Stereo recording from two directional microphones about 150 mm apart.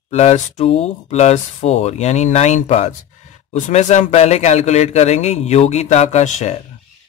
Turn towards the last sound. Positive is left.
turn(degrees=50)  # may be behind; listen again after turning